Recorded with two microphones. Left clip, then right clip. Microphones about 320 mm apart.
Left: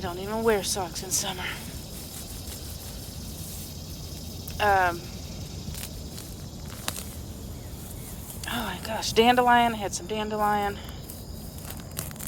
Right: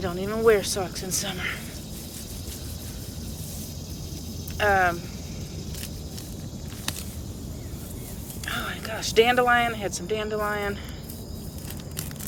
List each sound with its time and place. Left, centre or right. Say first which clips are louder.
0.0 s speech: right 4 dB; centre
4.5 s speech: right 1 dB; centre
8.5 s speech: left 1 dB; centre